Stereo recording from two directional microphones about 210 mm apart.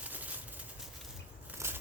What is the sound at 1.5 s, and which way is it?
Scissors, 10° right (ahead or behind).